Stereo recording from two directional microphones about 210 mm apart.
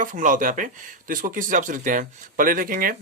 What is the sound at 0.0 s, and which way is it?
Speech, 40° right (ahead or behind).